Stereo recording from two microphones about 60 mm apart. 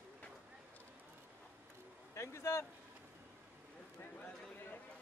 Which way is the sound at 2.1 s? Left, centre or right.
Left.